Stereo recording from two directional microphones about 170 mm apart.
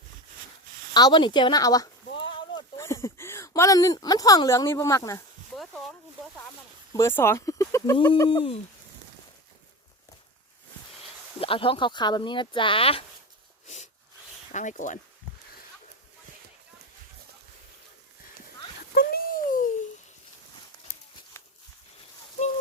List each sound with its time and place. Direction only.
0.9 s speech: 25° left (ahead or behind)
2.1 s a sound: 30° left (ahead or behind)
2.7 s speech: 15° left (ahead or behind)
5.5 s a sound: centre (ahead or behind)
6.9 s speech: 15° left (ahead or behind)
8.3 s speech: 30° left (ahead or behind)
11.3 s speech: 30° left (ahead or behind)
14.5 s speech: 45° left (ahead or behind)
18.9 s a sound: 60° left (ahead or behind)